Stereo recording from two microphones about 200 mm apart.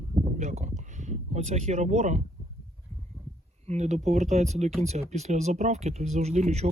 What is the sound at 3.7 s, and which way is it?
Speech, 35° right (ahead or behind).